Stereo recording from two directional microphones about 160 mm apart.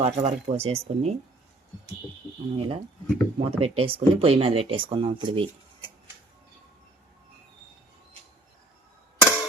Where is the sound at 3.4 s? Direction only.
35° right (ahead or behind).